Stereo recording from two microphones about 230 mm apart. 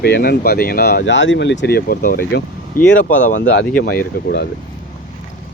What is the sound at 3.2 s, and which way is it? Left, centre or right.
Speech, left.